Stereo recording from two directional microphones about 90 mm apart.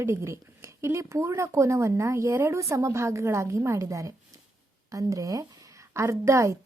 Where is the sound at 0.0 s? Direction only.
30° right (ahead or behind).